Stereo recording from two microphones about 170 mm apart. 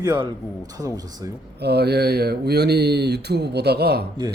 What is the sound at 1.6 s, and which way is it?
Speech, 75° right (ahead or behind).